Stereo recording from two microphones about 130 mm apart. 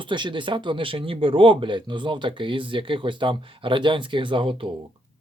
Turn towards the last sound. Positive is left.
turn(degrees=-40)  # may be behind; listen again after turning